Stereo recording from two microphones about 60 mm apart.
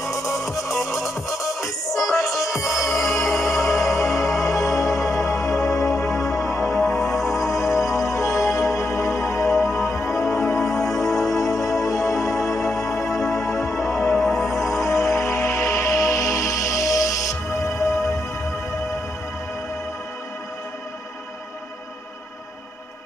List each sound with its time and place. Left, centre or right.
0.3 s music: centre
1.4 s music: left
2.4 s music: centre
4.4 s music: left
4.9 s music: centre
8.1 s music: left
9.5 s music: centre
15.2 s music: left